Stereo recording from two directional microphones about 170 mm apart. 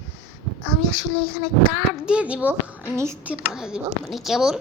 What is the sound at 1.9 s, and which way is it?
A woman's voice, 5° right (ahead or behind).